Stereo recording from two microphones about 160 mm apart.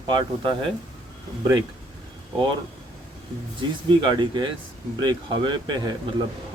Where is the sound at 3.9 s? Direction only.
30° right (ahead or behind).